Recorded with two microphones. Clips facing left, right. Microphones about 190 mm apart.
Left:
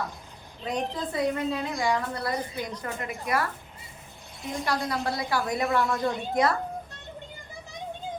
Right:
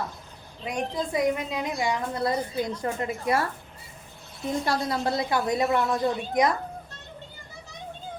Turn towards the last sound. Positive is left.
turn(degrees=-15)  # may be behind; listen again after turning